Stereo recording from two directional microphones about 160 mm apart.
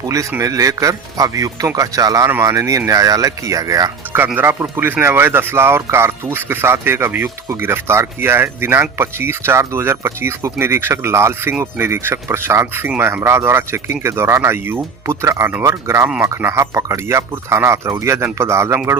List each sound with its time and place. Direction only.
0.0 s speech: 20° right (ahead or behind)
4.2 s speech: 10° right (ahead or behind)